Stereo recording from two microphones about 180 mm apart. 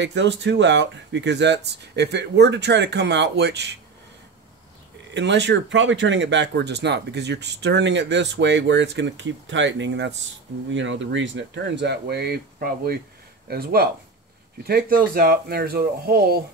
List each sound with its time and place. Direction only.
0.0 s speech: 80° right
5.1 s speech: 75° right (ahead or behind)
10.7 s speech: 90° right; by 16.3 s 60° right (ahead or behind)